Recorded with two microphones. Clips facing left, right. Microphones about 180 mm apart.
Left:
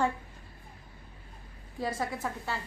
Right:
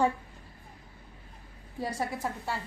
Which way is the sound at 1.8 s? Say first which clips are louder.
Even; 15° right (ahead or behind).